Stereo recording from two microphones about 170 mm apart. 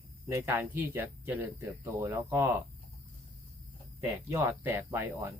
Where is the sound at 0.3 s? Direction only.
15° right (ahead or behind).